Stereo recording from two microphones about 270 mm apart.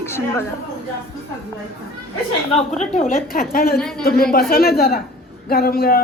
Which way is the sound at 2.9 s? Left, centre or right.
Left.